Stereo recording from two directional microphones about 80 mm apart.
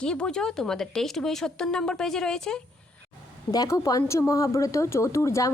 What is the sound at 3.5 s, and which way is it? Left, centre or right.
Speech, left.